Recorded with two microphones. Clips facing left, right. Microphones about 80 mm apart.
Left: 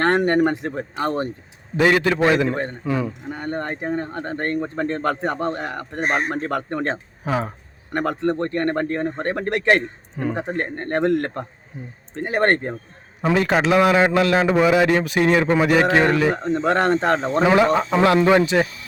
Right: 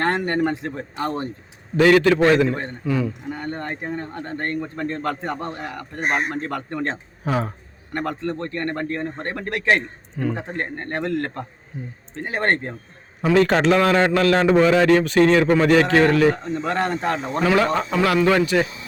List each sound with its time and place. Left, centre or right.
0.0 s speech: left
0.5 s a man's voice: left
4.1 s speech: left
4.4 s a man's voice: left
7.3 s a man's voice: centre
8.2 s a man's voice: left
10.2 s a man's voice: left
10.6 s a man's voice: left
11.0 s a man's voice: left
13.2 s a man's voice: centre
16.4 s a man's voice: left
16.8 s speech: left
17.2 s a man's voice: left